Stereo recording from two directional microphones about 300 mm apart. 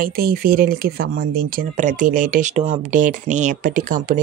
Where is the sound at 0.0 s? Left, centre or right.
Right.